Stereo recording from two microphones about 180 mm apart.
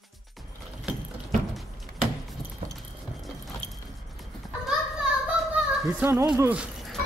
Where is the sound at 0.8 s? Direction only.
Centre (ahead or behind).